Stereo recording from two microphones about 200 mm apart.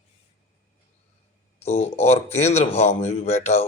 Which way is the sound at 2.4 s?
35° left (ahead or behind).